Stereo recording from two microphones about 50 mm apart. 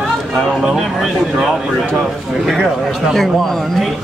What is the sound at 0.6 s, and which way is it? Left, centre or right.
Speech, centre.